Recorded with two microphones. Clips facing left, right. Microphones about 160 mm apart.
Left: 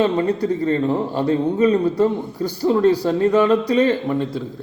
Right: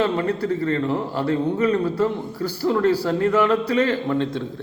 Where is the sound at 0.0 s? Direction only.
15° left (ahead or behind).